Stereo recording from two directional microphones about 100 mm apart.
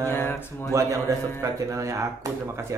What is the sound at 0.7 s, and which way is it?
A man's voice, 30° right (ahead or behind).